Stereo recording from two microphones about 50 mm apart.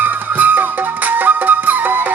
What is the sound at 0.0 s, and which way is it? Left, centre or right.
Music, right.